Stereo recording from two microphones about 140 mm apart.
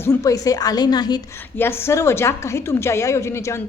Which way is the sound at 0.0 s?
20° left (ahead or behind).